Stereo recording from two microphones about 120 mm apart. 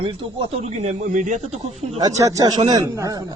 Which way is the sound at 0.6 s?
70° right (ahead or behind).